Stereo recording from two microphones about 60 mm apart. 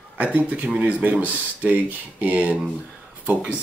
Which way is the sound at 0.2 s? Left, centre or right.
Right.